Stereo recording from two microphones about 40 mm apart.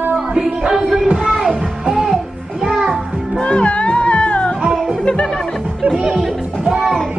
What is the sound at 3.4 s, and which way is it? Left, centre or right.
Music, left.